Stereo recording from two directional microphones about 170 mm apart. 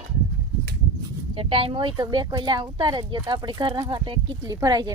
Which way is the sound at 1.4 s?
35° right (ahead or behind).